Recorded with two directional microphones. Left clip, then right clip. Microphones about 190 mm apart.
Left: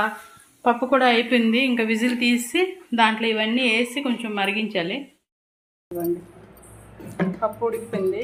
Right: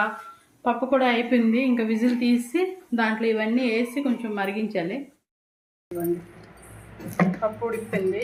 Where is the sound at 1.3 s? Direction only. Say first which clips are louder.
Left 2 dB; 5° right (ahead or behind).